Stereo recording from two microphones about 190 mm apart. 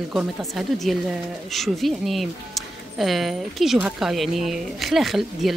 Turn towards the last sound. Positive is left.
turn(degrees=0)  # may be behind; listen again after turning